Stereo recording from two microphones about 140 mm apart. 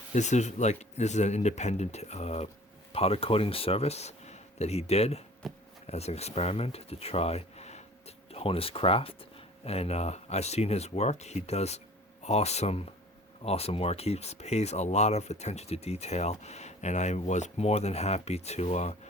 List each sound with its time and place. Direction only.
0.1 s speech: 55° left (ahead or behind)
5.4 s speech: centre (ahead or behind)
5.8 s speech: 50° left (ahead or behind)